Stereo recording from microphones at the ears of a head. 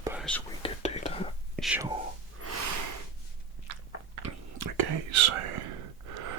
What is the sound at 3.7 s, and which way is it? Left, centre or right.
Biting, right.